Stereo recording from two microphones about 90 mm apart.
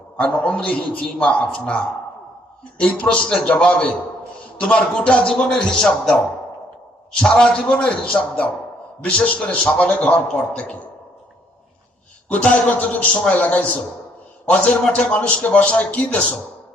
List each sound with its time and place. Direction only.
0.2 s a man's voice: 15° left (ahead or behind)
7.2 s a man's voice: 10° left (ahead or behind)
12.3 s a man's voice: 15° left (ahead or behind)